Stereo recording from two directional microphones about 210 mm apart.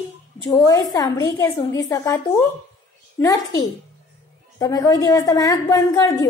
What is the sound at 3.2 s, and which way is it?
A woman's voice, 15° left (ahead or behind).